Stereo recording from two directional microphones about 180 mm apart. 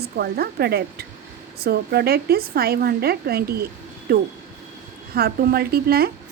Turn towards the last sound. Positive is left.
turn(degrees=-60)  # may be behind; listen again after turning